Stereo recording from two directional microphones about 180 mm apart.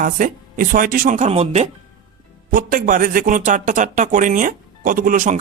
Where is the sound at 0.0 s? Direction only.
50° right (ahead or behind).